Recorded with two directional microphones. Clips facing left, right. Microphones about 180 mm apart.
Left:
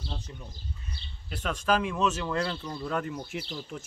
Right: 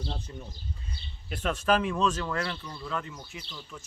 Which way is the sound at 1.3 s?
5° right (ahead or behind).